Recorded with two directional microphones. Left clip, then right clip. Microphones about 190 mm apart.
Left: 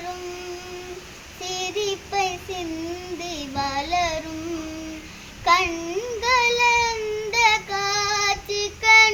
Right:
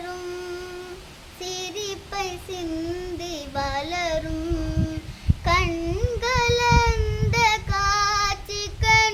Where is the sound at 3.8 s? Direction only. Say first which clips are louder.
Left 4 dB; 20° right (ahead or behind).